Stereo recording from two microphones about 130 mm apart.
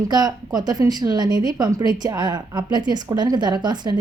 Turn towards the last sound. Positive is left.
turn(degrees=-35)  # may be behind; listen again after turning